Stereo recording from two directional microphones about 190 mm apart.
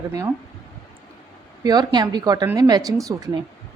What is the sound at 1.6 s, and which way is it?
A woman's voice, 20° right (ahead or behind).